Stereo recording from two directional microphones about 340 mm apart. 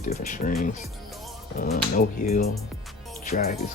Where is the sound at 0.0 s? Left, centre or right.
Left.